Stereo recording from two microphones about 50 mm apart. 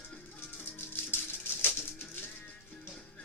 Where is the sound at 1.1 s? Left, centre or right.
Left.